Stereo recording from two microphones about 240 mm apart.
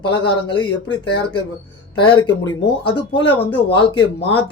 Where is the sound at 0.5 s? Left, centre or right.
Centre.